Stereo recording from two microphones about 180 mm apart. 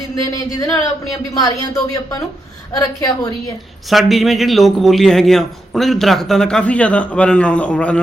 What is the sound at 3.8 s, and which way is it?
A man's voice, centre (ahead or behind).